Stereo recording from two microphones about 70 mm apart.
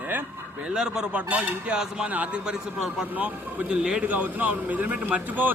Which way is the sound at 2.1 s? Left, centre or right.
Right.